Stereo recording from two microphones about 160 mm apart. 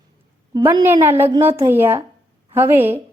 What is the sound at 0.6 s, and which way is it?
A woman's voice, 15° right (ahead or behind).